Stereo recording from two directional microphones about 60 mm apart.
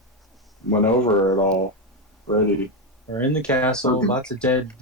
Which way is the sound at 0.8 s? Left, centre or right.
Centre.